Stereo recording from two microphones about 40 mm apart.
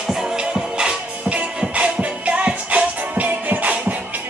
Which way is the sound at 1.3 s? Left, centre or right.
Right.